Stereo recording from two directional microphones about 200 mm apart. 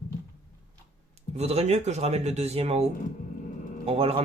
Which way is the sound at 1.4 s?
30° right (ahead or behind).